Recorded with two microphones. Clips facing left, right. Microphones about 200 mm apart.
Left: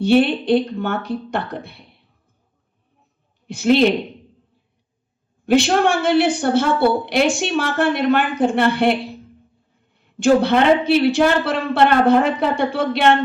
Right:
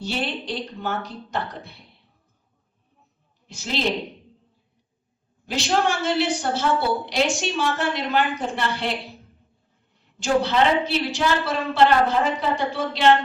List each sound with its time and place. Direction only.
0.0 s a woman's voice: 60° left (ahead or behind)
3.4 s a woman's voice: 60° left (ahead or behind)
5.5 s a woman's voice: 60° left (ahead or behind)
10.2 s a woman's voice: 55° left (ahead or behind)